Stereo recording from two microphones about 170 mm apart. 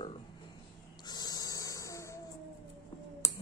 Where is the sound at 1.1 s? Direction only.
25° left (ahead or behind).